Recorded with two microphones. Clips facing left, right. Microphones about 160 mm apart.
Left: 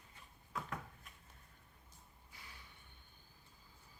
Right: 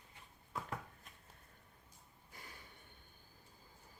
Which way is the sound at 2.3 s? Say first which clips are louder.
Right 3 dB; 45° right (ahead or behind).